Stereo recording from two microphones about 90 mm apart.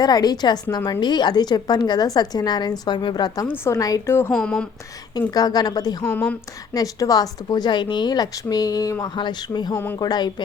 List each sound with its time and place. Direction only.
0.0 s a woman's voice: 50° left (ahead or behind)
3.4 s a woman's voice: 25° left (ahead or behind)
3.8 s a woman's voice: 40° left (ahead or behind)
4.3 s speech: 5° left (ahead or behind)
5.3 s a woman's voice: 45° left (ahead or behind)
6.1 s a woman's voice: 15° left (ahead or behind)
6.7 s a woman's voice: 45° left (ahead or behind)
9.1 s a woman's voice: 60° left (ahead or behind)